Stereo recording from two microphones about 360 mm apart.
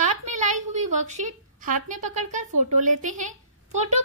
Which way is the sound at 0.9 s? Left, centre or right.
Centre.